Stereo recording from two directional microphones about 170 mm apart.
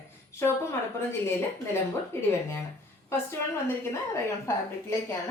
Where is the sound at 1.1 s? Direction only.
15° left (ahead or behind).